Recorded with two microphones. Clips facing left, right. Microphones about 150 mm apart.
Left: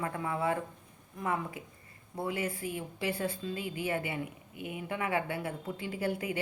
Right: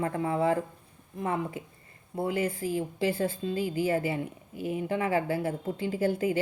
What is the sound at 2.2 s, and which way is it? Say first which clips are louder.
A woman's voice: right 5 dB; 30° right (ahead or behind).